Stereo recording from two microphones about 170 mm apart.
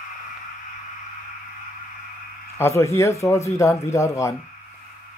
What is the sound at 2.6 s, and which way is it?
Speech, 15° left (ahead or behind).